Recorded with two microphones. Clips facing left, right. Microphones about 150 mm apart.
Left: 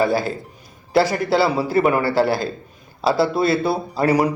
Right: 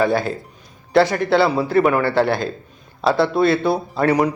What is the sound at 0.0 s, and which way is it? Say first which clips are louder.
A man's voice: right 1 dB; 5° left (ahead or behind).